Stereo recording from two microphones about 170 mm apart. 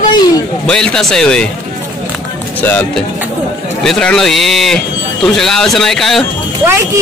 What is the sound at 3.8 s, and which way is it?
Speech, 5° left (ahead or behind).